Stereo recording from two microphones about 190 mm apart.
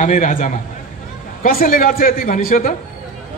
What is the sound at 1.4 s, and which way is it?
Chant, 45° left (ahead or behind).